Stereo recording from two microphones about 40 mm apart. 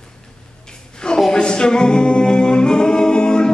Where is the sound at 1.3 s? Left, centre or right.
Left.